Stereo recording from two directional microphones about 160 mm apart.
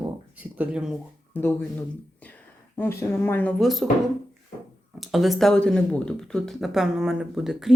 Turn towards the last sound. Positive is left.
turn(degrees=-5)  # may be behind; listen again after turning